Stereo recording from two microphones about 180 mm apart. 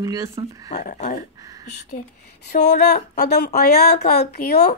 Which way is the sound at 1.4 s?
20° right (ahead or behind).